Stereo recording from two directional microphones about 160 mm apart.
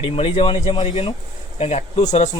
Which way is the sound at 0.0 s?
40° left (ahead or behind).